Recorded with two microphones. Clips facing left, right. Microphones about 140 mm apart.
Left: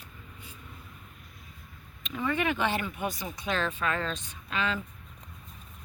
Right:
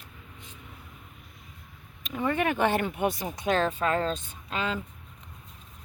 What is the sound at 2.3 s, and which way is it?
Speech, 50° right (ahead or behind).